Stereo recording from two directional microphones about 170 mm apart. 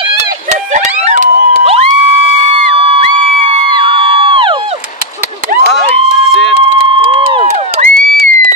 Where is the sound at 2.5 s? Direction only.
35° right (ahead or behind).